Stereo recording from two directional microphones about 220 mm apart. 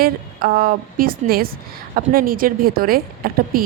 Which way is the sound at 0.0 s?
45° right (ahead or behind).